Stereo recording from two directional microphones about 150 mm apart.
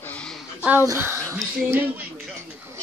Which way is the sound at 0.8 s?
20° right (ahead or behind).